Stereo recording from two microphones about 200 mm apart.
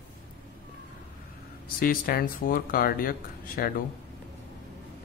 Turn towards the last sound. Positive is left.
turn(degrees=45)  # may be behind; listen again after turning